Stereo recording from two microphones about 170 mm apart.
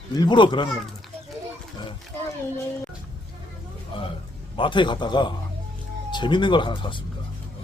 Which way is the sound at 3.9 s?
30° left (ahead or behind).